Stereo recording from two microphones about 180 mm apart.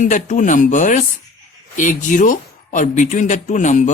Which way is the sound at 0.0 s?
45° left (ahead or behind).